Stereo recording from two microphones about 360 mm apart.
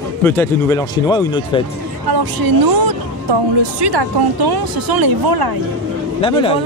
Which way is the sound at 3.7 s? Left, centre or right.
Right.